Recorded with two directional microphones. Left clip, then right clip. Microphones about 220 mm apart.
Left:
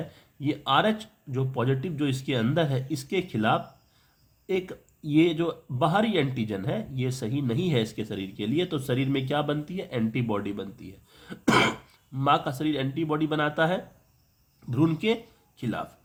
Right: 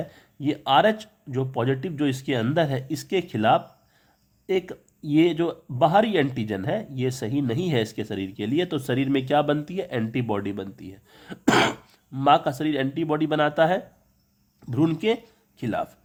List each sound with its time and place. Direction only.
0.1 s speech: 35° right (ahead or behind)